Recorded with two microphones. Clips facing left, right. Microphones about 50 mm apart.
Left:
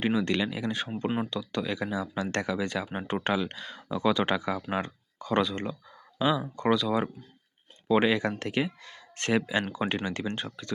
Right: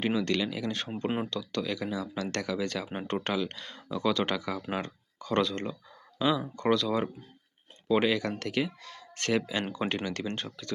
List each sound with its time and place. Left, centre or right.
0.0 s speech: centre
1.0 s speech: centre
1.3 s speech: centre
2.8 s speech: centre
3.1 s speech: centre